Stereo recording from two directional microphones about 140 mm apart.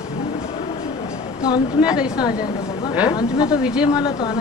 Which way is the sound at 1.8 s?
5° right (ahead or behind).